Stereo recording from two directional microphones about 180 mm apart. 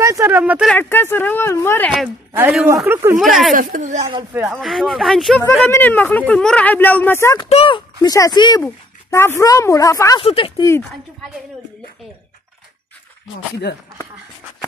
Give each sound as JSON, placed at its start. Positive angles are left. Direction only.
{"t": 0.0, "sound": "a man's voice", "side_deg": -15}
{"t": 0.7, "sound": "speech", "side_deg": 10}
{"t": 2.3, "sound": "a man's voice", "side_deg": -10}
{"t": 3.5, "sound": "a woman's voice", "side_deg": -45}
{"t": 4.3, "sound": "a man's voice", "side_deg": -10}
{"t": 4.6, "sound": "speech", "side_deg": 0}
{"t": 5.7, "sound": "speech", "side_deg": 10}
{"t": 7.4, "sound": "speech", "side_deg": 30}
{"t": 8.6, "sound": "speech", "side_deg": 15}
{"t": 10.2, "sound": "speech", "side_deg": 30}